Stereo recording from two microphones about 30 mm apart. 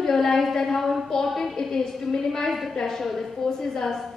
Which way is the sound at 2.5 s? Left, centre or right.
Centre.